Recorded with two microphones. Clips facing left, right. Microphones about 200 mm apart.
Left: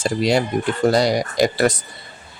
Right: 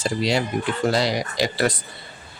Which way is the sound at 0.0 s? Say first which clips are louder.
Left 4 dB; 50° left (ahead or behind).